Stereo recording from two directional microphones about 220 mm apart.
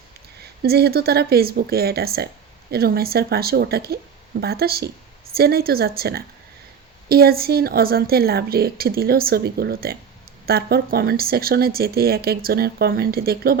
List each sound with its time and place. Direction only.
0.6 s a woman's voice: 45° right (ahead or behind)